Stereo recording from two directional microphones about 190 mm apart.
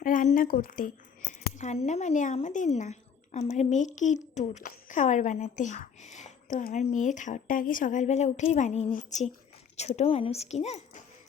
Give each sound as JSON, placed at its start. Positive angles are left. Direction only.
{"t": 0.0, "sound": "a woman's voice", "side_deg": 45}